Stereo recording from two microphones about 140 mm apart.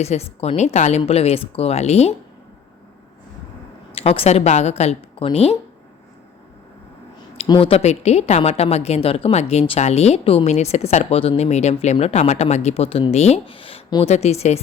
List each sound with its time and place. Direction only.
0.0 s a woman's voice: 50° left (ahead or behind)
3.9 s a woman's voice: 45° left (ahead or behind)
7.4 s speech: 30° left (ahead or behind)
7.7 s a woman's voice: 50° left (ahead or behind)